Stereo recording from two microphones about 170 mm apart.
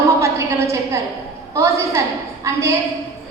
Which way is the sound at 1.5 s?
15° right (ahead or behind).